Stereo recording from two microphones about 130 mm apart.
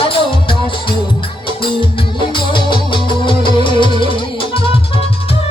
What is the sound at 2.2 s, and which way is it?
Music, 40° left (ahead or behind).